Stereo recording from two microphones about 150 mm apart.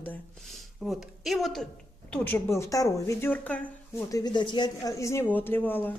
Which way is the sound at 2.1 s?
15° left (ahead or behind).